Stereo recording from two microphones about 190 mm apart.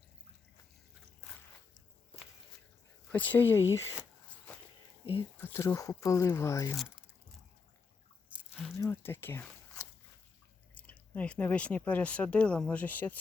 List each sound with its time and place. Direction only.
3.1 s speech: 10° left (ahead or behind)
5.4 s speech: 10° left (ahead or behind)
8.4 s biting: 5° right (ahead or behind)
8.7 s speech: 10° left (ahead or behind)
10.8 s speech: 10° left (ahead or behind)